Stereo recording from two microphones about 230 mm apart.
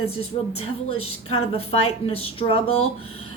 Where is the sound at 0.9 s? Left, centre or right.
Left.